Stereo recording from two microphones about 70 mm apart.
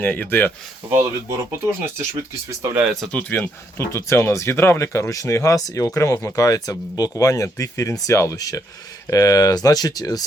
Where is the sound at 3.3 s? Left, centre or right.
Left.